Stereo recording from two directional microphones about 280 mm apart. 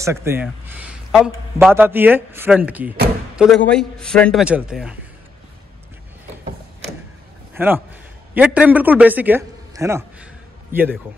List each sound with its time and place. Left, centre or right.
0.0 s a man's voice: centre
7.5 s a man's voice: centre